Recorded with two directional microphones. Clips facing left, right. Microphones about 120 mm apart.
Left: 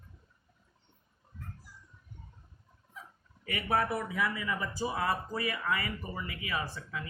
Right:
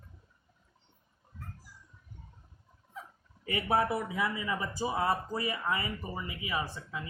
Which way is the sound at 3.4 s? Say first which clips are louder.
Right 2 dB; 25° right (ahead or behind).